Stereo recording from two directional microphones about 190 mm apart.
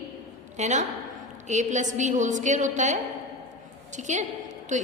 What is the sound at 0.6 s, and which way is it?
A woman's voice, 40° right (ahead or behind).